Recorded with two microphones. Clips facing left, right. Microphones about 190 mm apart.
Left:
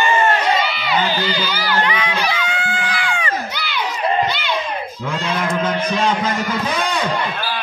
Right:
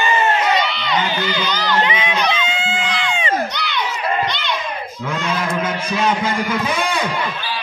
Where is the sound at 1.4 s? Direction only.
10° left (ahead or behind).